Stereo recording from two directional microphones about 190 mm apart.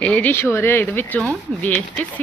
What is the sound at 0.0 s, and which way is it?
A woman's voice, 5° left (ahead or behind).